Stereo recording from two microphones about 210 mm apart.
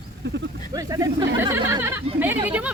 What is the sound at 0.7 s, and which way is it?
Speech, 15° right (ahead or behind).